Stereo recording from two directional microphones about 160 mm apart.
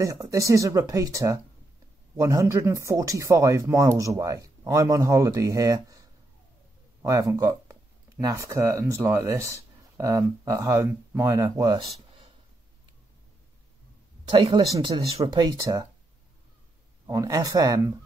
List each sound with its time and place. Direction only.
0.0 s speech: 20° right (ahead or behind)
14.2 s speech: 30° right (ahead or behind)
17.0 s speech: 20° right (ahead or behind)